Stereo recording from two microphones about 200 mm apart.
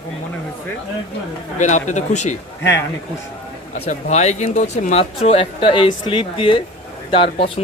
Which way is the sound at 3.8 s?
35° left (ahead or behind).